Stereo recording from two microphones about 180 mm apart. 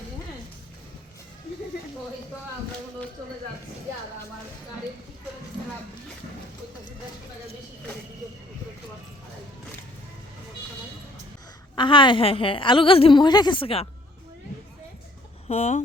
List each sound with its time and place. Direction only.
11.8 s a woman's voice: 25° left (ahead or behind)
15.4 s speech: 40° left (ahead or behind)